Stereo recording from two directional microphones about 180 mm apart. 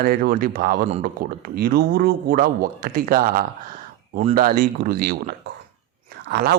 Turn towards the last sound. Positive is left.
turn(degrees=-60)  # may be behind; listen again after turning